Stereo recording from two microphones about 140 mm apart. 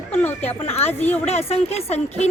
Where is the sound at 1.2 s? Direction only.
45° left (ahead or behind).